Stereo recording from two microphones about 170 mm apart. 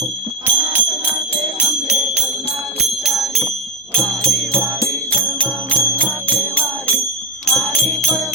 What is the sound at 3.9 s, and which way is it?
Jingle bell, 5° left (ahead or behind).